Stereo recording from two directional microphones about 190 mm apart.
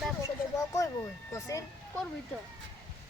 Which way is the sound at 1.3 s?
15° left (ahead or behind).